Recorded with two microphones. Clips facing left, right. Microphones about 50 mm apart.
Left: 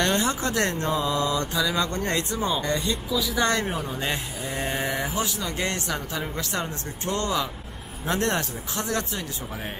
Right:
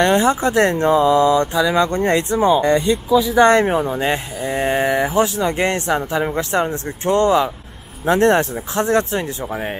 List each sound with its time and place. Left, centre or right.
0.0 s speech: right